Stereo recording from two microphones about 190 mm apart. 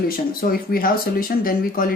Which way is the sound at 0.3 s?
50° left (ahead or behind).